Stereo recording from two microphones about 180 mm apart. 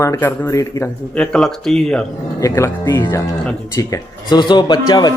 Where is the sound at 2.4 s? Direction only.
15° left (ahead or behind).